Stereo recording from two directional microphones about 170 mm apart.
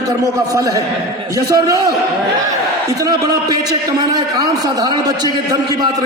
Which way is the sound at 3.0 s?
20° right (ahead or behind).